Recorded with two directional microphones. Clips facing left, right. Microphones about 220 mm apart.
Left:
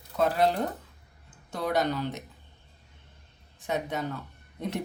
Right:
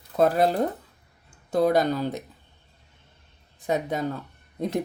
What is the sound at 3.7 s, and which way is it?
Speech, 35° right (ahead or behind).